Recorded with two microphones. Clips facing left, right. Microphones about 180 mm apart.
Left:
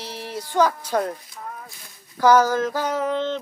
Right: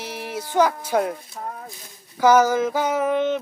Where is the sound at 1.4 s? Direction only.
45° right (ahead or behind).